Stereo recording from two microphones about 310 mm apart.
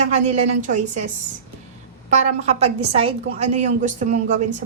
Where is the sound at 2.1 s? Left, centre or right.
Right.